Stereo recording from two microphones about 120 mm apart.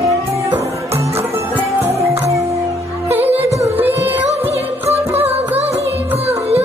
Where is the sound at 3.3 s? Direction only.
25° right (ahead or behind).